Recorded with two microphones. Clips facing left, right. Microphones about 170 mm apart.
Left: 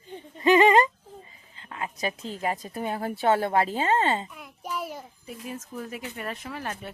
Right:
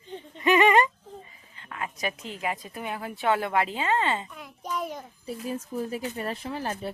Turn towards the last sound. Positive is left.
turn(degrees=-30)  # may be behind; listen again after turning